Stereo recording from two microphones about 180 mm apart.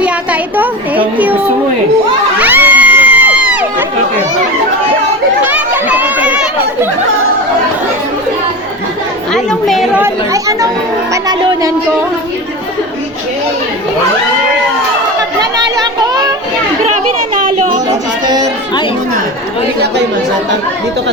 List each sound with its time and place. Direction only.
0.0 s a child's voice: 10° right (ahead or behind)
2.4 s crowd: 10° right (ahead or behind)
5.4 s chatter: 10° right (ahead or behind)
9.3 s a woman's voice: centre (ahead or behind)
10.0 s a child's voice: 20° right (ahead or behind)
15.4 s a sound: 20° right (ahead or behind)
16.8 s children playing: 45° right (ahead or behind)